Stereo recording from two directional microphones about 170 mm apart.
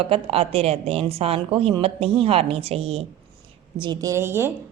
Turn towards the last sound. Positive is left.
turn(degrees=-15)  # may be behind; listen again after turning